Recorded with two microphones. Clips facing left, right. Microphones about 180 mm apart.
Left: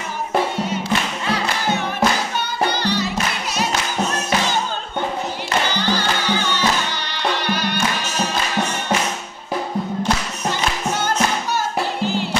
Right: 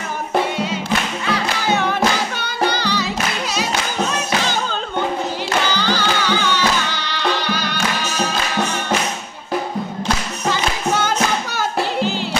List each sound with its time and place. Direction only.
1.7 s music: 90° right
5.7 s music: 90° right
10.5 s music: 90° right